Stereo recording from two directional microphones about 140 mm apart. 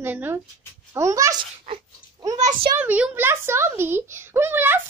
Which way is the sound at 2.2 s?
30° right (ahead or behind).